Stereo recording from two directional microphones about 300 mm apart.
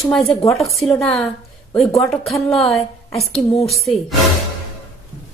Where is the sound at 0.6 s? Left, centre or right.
Centre.